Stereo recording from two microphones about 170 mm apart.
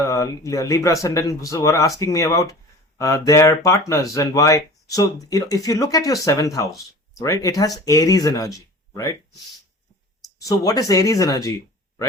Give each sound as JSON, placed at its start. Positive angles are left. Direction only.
{"t": 0.0, "sound": "speech", "side_deg": 20}